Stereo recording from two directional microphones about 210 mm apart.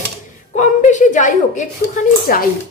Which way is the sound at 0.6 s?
35° left (ahead or behind).